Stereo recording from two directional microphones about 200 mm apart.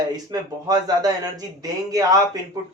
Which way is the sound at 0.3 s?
20° right (ahead or behind).